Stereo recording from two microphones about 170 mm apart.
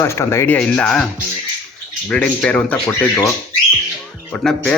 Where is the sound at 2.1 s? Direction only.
5° left (ahead or behind).